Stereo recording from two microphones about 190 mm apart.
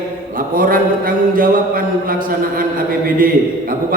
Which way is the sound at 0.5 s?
50° right (ahead or behind).